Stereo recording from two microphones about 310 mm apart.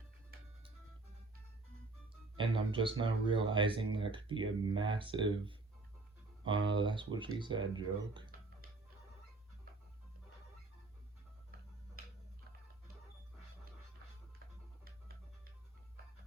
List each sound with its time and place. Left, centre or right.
2.3 s speech: centre
6.7 s speech: centre